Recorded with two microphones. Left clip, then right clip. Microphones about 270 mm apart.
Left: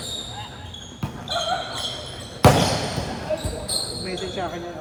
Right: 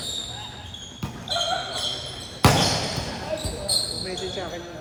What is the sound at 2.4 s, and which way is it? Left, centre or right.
Basketball bounce, centre.